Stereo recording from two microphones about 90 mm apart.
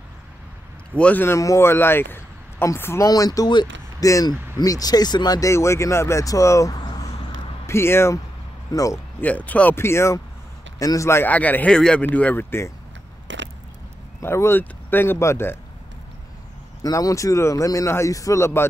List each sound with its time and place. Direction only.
0.9 s speech: 15° left (ahead or behind)
1.2 s speech: 35° left (ahead or behind)
3.1 s speech: 40° left (ahead or behind)
5.5 s speech: 30° left (ahead or behind); by 7.1 s 50° left (ahead or behind)
7.6 s speech: 30° left (ahead or behind)
8.7 s speech: 40° left (ahead or behind)
9.2 s speech: 15° left (ahead or behind)
9.8 s speech: 30° left (ahead or behind)
11.2 s speech: 20° left (ahead or behind)
14.2 s speech: 30° left (ahead or behind)
16.8 s speech: 40° left (ahead or behind)